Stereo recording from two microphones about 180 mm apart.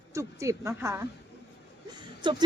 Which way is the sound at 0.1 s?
15° right (ahead or behind).